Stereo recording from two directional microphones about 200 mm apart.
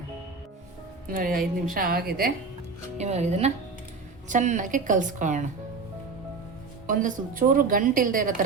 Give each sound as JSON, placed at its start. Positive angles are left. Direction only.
{"t": 1.0, "sound": "a woman's voice", "side_deg": -45}
{"t": 3.0, "sound": "a woman's voice", "side_deg": -35}
{"t": 6.8, "sound": "a woman's voice", "side_deg": -40}